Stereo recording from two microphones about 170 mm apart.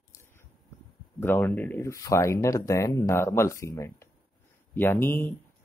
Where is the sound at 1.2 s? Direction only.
10° left (ahead or behind).